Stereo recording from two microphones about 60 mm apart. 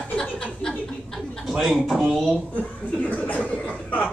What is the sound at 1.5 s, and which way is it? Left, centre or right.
Speech, centre.